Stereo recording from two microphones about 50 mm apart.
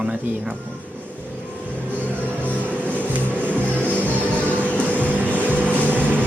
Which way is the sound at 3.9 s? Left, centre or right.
Left.